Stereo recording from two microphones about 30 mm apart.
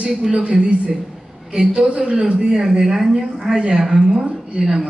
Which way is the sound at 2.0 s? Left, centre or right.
Right.